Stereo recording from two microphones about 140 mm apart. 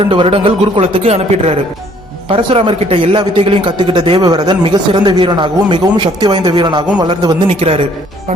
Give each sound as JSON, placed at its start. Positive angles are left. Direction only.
{"t": 0.0, "sound": "speech", "side_deg": -40}
{"t": 2.3, "sound": "speech", "side_deg": -40}
{"t": 7.4, "sound": "speech", "side_deg": -45}